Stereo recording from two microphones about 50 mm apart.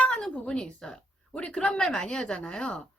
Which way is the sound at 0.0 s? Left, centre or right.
Centre.